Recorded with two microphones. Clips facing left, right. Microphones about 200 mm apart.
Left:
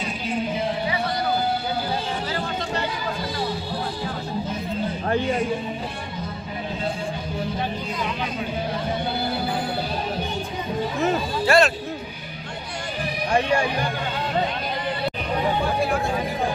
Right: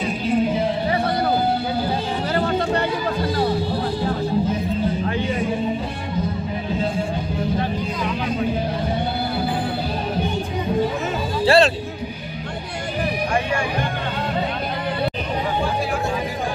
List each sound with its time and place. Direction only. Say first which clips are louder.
2.3 s chatter: right 7 dB; 60° right (ahead or behind)
11.4 s music: right 3 dB; 30° right (ahead or behind)